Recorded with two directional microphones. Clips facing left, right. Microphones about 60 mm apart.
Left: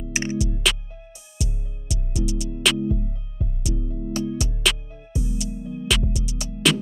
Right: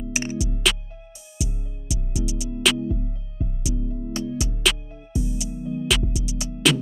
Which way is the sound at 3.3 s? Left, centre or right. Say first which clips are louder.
Right 1 dB; centre.